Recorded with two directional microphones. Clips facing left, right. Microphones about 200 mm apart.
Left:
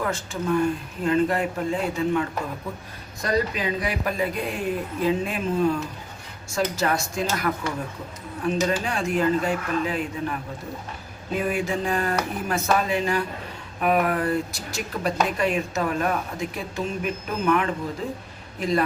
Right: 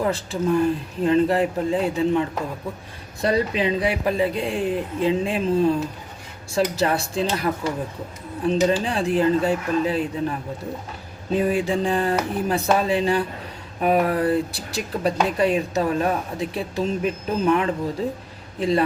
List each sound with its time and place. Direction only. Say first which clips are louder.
0.0 s a man's voice: right 5 dB; 30° right (ahead or behind)